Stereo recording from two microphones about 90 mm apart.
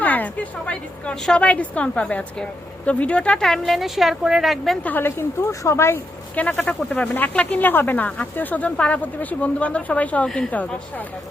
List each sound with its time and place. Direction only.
0.0 s a woman's voice: 20° left (ahead or behind); by 4.8 s centre (ahead or behind)
4.8 s a woman's voice: 20° left (ahead or behind)
6.3 s a woman's voice: 15° left (ahead or behind)